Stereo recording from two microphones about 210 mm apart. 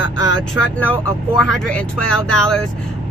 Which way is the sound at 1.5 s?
5° left (ahead or behind).